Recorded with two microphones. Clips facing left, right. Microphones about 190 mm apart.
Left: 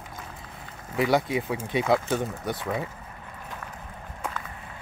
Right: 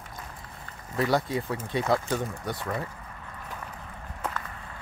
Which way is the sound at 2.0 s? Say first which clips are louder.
Left 2 dB; centre (ahead or behind).